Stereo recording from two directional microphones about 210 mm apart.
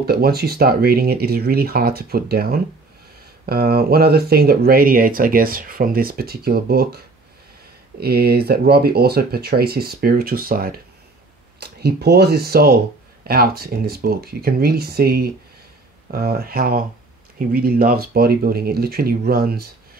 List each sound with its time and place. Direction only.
0.0 s speech: 45° right (ahead or behind)
8.0 s speech: 50° right (ahead or behind)